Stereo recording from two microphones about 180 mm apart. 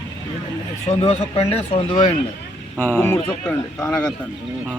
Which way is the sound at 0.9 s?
35° left (ahead or behind).